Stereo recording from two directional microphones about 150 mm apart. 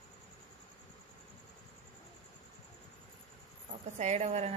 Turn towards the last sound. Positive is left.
turn(degrees=-45)  # may be behind; listen again after turning